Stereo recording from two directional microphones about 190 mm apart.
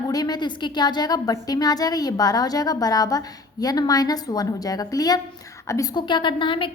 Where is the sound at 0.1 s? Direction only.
20° left (ahead or behind).